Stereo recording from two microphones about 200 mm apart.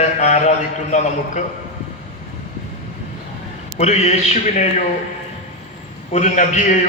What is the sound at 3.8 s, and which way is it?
A man's voice, 35° left (ahead or behind).